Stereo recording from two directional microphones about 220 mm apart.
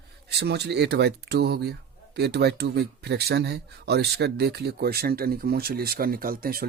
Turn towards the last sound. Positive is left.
turn(degrees=-40)  # may be behind; listen again after turning